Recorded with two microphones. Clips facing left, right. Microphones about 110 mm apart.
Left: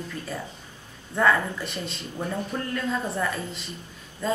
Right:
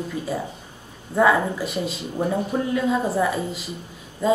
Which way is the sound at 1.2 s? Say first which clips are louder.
Right 4 dB; 10° right (ahead or behind).